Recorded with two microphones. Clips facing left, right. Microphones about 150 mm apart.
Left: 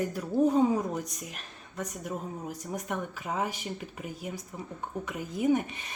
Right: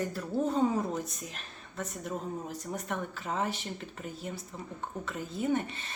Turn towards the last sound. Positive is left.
turn(degrees=10)  # may be behind; listen again after turning